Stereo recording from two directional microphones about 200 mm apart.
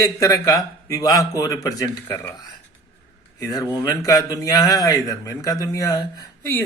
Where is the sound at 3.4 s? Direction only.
15° left (ahead or behind).